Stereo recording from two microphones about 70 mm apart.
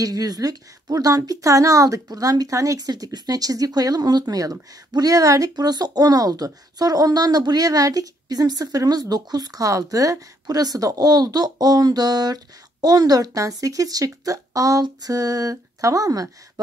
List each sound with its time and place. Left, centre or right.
0.0 s a woman's voice: right